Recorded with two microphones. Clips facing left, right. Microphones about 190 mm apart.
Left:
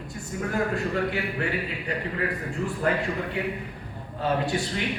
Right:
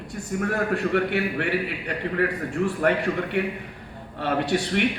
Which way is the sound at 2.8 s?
70° right (ahead or behind).